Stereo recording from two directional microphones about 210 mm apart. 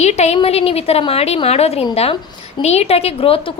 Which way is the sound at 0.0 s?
30° left (ahead or behind).